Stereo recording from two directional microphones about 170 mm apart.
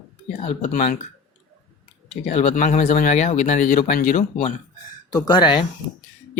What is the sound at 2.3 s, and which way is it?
Speech, 50° left (ahead or behind).